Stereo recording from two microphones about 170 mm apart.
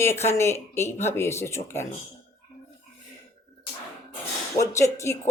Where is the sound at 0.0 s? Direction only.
15° left (ahead or behind).